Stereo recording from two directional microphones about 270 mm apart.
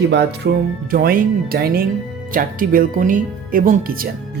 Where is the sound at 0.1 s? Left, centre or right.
Right.